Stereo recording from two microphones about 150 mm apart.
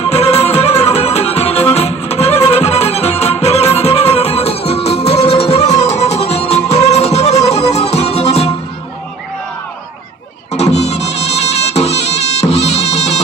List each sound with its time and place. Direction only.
0.0 s music: 40° left (ahead or behind)
10.5 s music: 45° left (ahead or behind)